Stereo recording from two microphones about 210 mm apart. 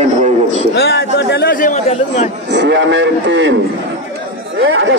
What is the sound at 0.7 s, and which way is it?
Chatter, 50° left (ahead or behind).